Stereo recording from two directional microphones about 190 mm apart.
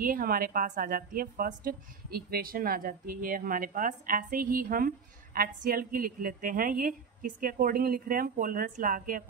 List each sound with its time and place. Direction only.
0.0 s a woman's voice: 50° right (ahead or behind)